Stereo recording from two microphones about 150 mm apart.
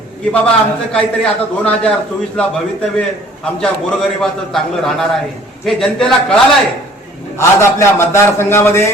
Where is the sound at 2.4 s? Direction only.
5° left (ahead or behind).